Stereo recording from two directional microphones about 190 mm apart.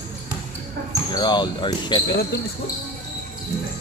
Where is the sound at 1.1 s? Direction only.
25° left (ahead or behind).